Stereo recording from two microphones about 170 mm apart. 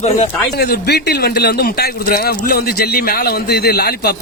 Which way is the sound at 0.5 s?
70° left (ahead or behind).